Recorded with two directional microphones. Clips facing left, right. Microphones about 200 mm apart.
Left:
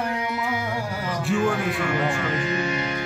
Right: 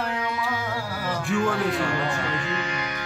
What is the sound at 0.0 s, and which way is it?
Carnatic music, 20° left (ahead or behind).